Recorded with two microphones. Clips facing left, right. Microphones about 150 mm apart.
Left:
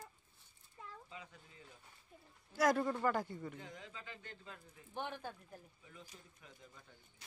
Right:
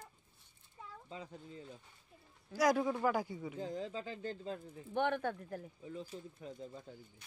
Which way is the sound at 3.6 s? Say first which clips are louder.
Right 12 dB; 35° right (ahead or behind).